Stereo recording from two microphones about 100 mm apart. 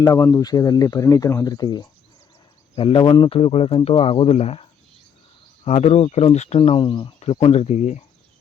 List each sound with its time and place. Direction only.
0.0 s speech: 30° left (ahead or behind)
2.7 s speech: 65° left (ahead or behind)
3.0 s speech: 50° left (ahead or behind)
3.2 s speech: 75° left (ahead or behind); by 4.6 s 90° left
5.6 s speech: 90° left; by 7.1 s 55° left (ahead or behind)
7.4 s speech: 90° left